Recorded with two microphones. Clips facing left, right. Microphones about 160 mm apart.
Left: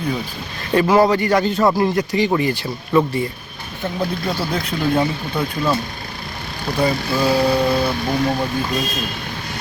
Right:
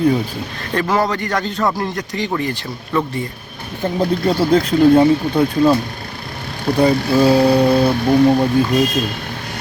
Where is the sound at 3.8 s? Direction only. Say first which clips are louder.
Right 6 dB; 35° right (ahead or behind).